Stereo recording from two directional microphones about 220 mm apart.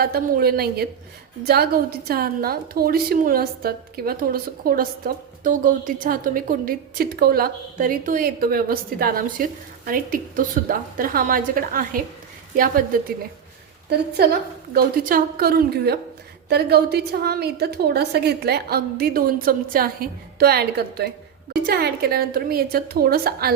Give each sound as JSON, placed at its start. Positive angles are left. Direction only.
{"t": 0.0, "sound": "a woman's voice", "side_deg": -45}
{"t": 14.2, "sound": "a woman's voice", "side_deg": -45}